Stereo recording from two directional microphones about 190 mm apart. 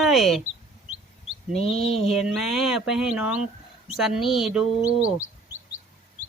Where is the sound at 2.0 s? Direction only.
Centre (ahead or behind).